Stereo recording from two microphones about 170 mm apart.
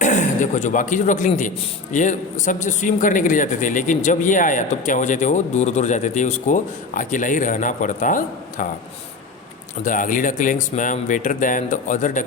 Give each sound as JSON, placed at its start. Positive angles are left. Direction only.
{"t": 0.0, "sound": "a man's voice", "side_deg": 45}
{"t": 9.8, "sound": "a man's voice", "side_deg": 50}